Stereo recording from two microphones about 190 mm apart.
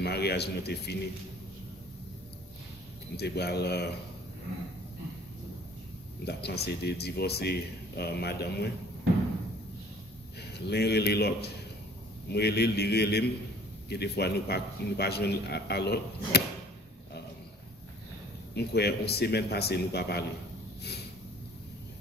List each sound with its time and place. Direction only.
0.0 s a man's voice: 60° left (ahead or behind)
3.2 s a man's voice: 60° left (ahead or behind)
6.2 s a man's voice: 60° left (ahead or behind)
10.4 s a man's voice: 60° left (ahead or behind)
18.5 s a man's voice: 60° left (ahead or behind)